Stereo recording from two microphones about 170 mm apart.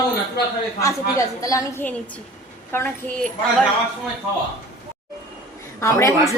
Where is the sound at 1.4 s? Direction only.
20° left (ahead or behind).